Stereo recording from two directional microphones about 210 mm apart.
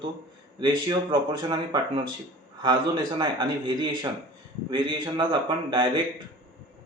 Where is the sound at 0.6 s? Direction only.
20° right (ahead or behind).